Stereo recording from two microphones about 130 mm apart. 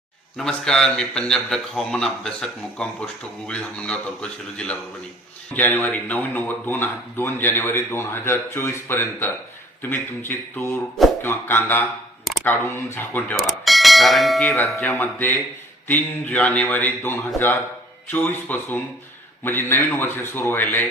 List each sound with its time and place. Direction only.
0.3 s a man's voice: 5° left (ahead or behind)
13.3 s bell: centre (ahead or behind)
14.8 s a man's voice: 15° left (ahead or behind)